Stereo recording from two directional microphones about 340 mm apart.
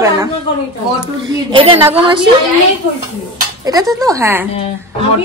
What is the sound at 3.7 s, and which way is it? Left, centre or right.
Speech, centre.